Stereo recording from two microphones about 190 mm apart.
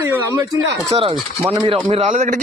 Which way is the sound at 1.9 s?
35° right (ahead or behind).